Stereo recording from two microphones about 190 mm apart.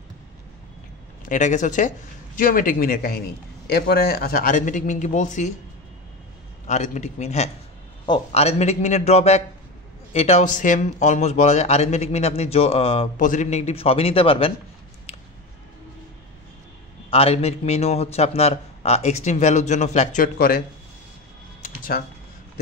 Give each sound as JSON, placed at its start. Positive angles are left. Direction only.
{"t": 1.2, "sound": "speech", "side_deg": 40}
{"t": 6.7, "sound": "a man's voice", "side_deg": 40}
{"t": 13.2, "sound": "a man's voice", "side_deg": 40}
{"t": 17.1, "sound": "a man's voice", "side_deg": 30}
{"t": 20.3, "sound": "speech", "side_deg": 50}